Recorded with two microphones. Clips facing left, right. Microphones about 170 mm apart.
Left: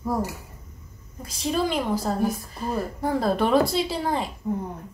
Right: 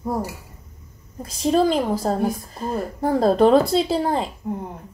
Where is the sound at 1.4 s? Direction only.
40° right (ahead or behind).